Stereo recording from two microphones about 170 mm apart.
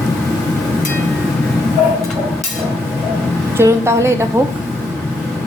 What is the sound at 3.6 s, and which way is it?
Speech, 15° right (ahead or behind).